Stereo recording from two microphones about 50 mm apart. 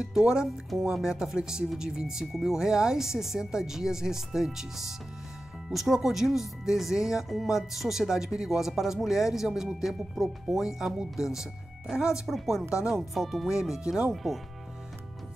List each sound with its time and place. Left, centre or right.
0.0 s speech: centre
12.3 s speech: centre
13.5 s speech: centre
14.1 s speech: centre